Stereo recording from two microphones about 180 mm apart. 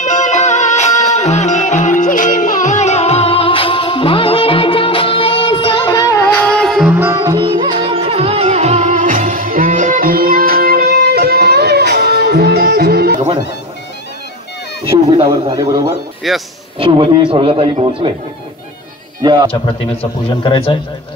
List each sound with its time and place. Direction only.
0.0 s music: 40° left (ahead or behind); by 7.0 s centre (ahead or behind)
7.0 s music: 15° right (ahead or behind); by 13.2 s 60° right (ahead or behind)
14.9 s a man's voice: 30° right (ahead or behind)
16.3 s speech: centre (ahead or behind)
16.7 s a man's voice: 30° right (ahead or behind)
19.2 s a man's voice: 25° right (ahead or behind)
19.6 s a man's voice: 30° left (ahead or behind)